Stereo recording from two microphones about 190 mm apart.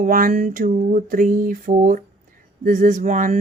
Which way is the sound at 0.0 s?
45° right (ahead or behind).